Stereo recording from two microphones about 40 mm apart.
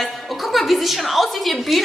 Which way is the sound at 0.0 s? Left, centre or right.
Centre.